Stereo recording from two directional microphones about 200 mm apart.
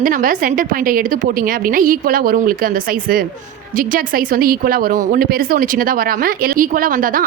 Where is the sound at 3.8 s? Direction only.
45° right (ahead or behind).